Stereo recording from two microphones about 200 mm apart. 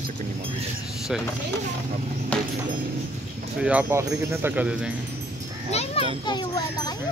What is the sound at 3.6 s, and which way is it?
Speech, 5° right (ahead or behind).